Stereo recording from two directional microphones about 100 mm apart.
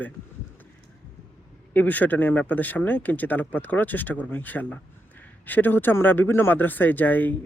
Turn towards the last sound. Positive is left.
turn(degrees=20)  # may be behind; listen again after turning